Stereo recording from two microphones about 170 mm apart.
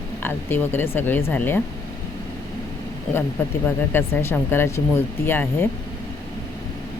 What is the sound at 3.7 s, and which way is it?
Speech, 15° left (ahead or behind).